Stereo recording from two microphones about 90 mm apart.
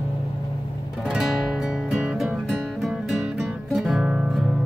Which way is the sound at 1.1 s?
5° right (ahead or behind).